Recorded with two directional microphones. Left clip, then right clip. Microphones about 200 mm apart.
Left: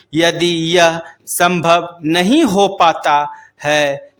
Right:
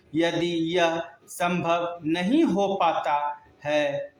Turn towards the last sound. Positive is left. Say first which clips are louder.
# left 10 dB
turn(degrees=45)  # may be behind; listen again after turning